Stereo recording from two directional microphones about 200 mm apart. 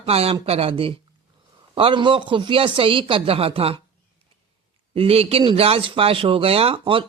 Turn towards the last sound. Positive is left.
turn(degrees=-25)  # may be behind; listen again after turning